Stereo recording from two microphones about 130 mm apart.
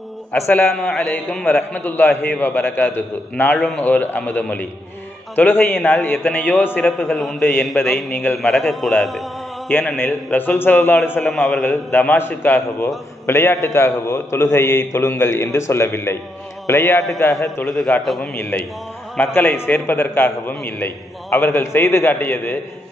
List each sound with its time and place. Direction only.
0.3 s a man's voice: 15° left (ahead or behind)
7.2 s a man's voice: centre (ahead or behind)
9.9 s a man's voice: 15° left (ahead or behind)
11.2 s a man's voice: centre (ahead or behind)
11.9 s a man's voice: 15° left (ahead or behind)
17.6 s a man's voice: centre (ahead or behind)
18.3 s a man's voice: 15° left (ahead or behind)